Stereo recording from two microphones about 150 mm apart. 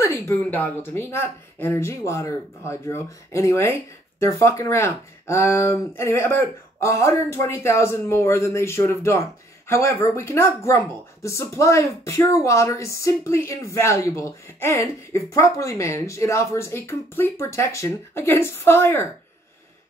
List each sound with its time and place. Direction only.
0.2 s speech: 15° left (ahead or behind)